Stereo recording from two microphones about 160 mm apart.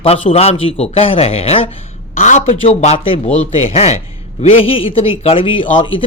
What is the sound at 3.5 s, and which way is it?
Speech, 40° left (ahead or behind).